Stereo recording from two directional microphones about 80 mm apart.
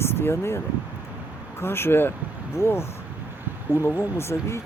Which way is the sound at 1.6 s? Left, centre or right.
Left.